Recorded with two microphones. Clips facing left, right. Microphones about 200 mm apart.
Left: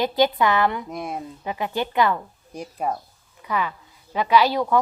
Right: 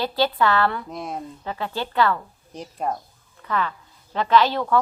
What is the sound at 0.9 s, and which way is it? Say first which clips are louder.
Speech: left 1 dB; centre (ahead or behind).